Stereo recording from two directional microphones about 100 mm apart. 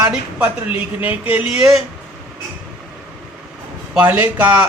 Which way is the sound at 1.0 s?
15° right (ahead or behind).